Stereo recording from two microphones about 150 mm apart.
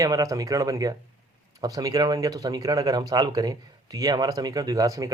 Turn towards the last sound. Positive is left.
turn(degrees=-20)  # may be behind; listen again after turning